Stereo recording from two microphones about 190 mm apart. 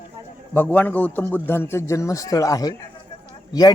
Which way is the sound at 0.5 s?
10° left (ahead or behind).